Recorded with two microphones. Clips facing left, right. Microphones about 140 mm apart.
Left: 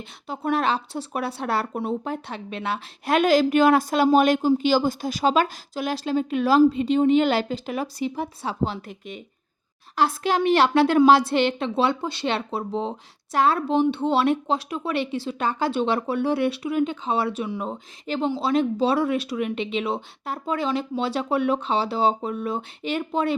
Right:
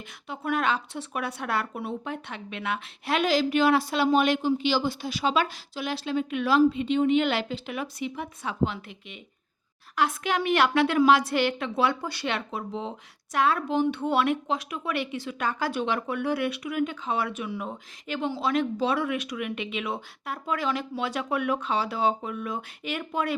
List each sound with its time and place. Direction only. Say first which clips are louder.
0.3 s a woman's voice: left 3 dB; 30° left (ahead or behind)
3.2 s a woman's voice: left 5 dB; 50° left (ahead or behind); by 23.3 s 30° left (ahead or behind)